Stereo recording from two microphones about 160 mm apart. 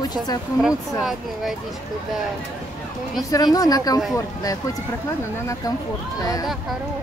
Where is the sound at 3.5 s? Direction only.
25° left (ahead or behind).